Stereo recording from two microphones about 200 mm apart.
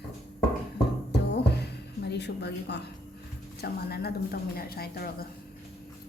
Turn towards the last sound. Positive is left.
turn(degrees=50)  # may be behind; listen again after turning